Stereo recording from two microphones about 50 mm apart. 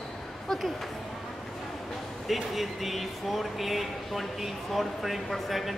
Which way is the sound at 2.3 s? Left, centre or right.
Centre.